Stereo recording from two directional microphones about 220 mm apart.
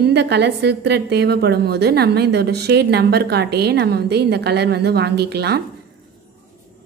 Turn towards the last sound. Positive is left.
turn(degrees=-45)  # may be behind; listen again after turning